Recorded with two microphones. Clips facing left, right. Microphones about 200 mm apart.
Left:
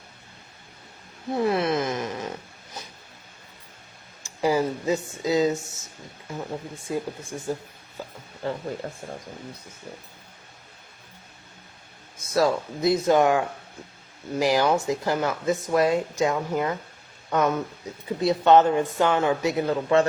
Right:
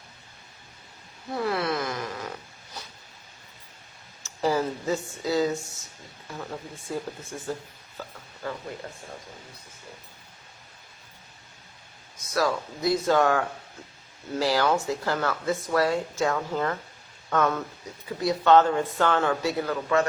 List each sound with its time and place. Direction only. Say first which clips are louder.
1.3 s a sound: left 4 dB; 20° left (ahead or behind)
4.2 s speech: left 2 dB; 10° left (ahead or behind)
12.1 s speech: left 4 dB; 25° left (ahead or behind)